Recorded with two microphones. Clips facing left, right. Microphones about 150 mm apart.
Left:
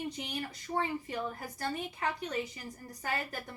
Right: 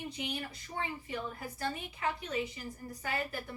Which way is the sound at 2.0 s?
45° left (ahead or behind).